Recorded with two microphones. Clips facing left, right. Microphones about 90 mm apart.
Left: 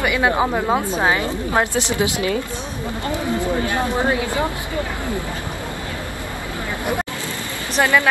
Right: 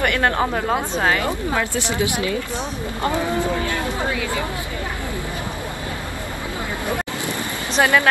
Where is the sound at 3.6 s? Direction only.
20° left (ahead or behind).